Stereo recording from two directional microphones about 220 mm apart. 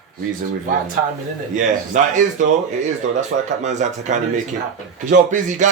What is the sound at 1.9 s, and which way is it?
Speech, 35° right (ahead or behind).